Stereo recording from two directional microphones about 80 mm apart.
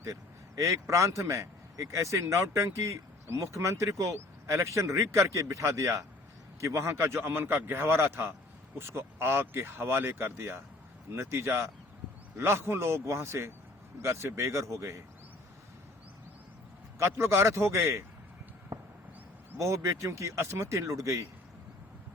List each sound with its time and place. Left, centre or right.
0.0 s a man's voice: right
17.0 s a man's voice: right
19.5 s a man's voice: right